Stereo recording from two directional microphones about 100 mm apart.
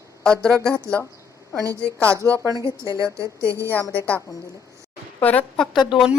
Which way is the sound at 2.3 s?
35° right (ahead or behind).